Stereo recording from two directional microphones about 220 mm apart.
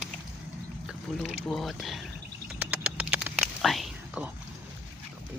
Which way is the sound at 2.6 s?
5° right (ahead or behind).